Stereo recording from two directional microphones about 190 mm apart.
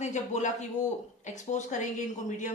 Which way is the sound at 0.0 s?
40° left (ahead or behind).